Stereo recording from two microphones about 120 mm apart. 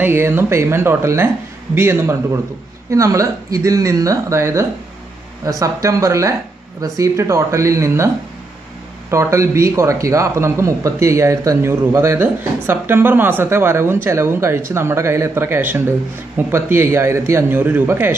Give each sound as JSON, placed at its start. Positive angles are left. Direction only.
{"t": 0.0, "sound": "a man's voice", "side_deg": -20}
{"t": 9.1, "sound": "a man's voice", "side_deg": -25}